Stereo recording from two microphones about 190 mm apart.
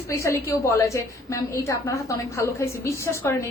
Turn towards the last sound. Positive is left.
turn(degrees=15)  # may be behind; listen again after turning